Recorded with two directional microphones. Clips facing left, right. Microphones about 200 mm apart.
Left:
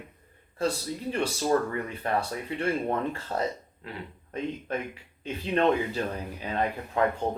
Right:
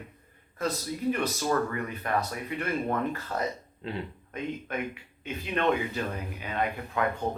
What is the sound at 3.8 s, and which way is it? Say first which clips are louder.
Speech: right 5 dB; 25° right (ahead or behind).